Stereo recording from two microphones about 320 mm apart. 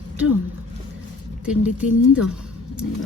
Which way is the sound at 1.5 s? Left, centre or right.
Centre.